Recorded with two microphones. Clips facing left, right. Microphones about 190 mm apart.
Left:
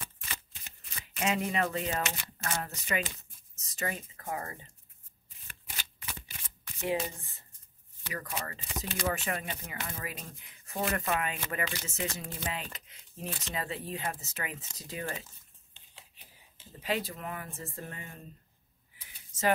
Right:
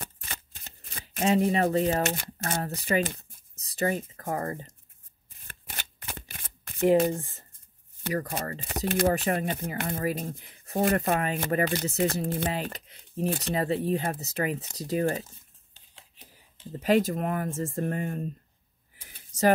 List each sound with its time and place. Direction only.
0.0 s shuffling cards: 50° right (ahead or behind)
0.8 s speech: 35° right (ahead or behind)
5.4 s shuffling cards: 55° right (ahead or behind)
8.0 s speech: 40° right (ahead or behind)
8.6 s speech: 55° right (ahead or behind)
9.0 s speech: 35° right (ahead or behind)
16.8 s speech: 45° right (ahead or behind)
18.9 s a sound: 40° right (ahead or behind)